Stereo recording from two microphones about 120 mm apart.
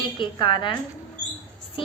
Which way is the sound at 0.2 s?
45° left (ahead or behind).